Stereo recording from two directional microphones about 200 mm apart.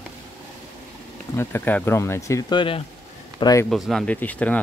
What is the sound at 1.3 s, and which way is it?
Speech, 10° left (ahead or behind).